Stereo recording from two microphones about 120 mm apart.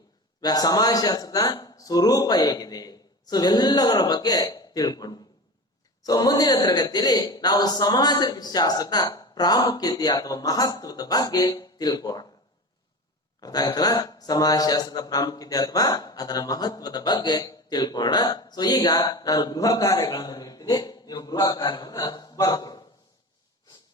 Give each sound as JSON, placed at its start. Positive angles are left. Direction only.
{"t": 0.4, "sound": "a man's voice", "side_deg": 35}
{"t": 13.4, "sound": "a man's voice", "side_deg": 30}